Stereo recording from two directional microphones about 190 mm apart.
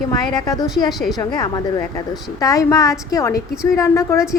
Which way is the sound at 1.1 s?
20° left (ahead or behind).